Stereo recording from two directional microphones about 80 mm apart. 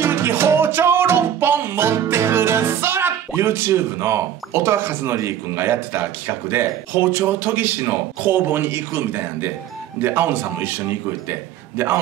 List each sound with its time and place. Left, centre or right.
0.0 s music: right
9.9 s a man's voice: right